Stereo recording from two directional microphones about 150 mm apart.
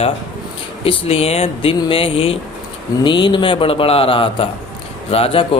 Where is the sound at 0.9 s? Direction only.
40° left (ahead or behind).